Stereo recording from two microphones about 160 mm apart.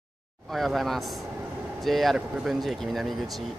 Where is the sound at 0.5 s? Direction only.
Centre (ahead or behind).